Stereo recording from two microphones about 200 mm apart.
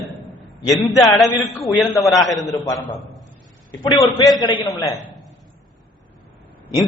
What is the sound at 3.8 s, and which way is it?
A man's voice, 20° left (ahead or behind).